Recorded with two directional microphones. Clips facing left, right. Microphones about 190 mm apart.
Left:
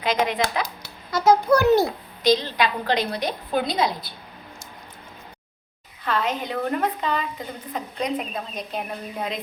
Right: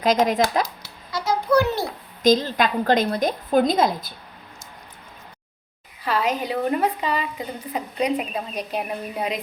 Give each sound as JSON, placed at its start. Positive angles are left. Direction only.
{"t": 0.0, "sound": "a woman's voice", "side_deg": -45}
{"t": 1.1, "sound": "a child's voice", "side_deg": 45}
{"t": 2.2, "sound": "a woman's voice", "side_deg": -45}
{"t": 6.1, "sound": "a woman's voice", "side_deg": -10}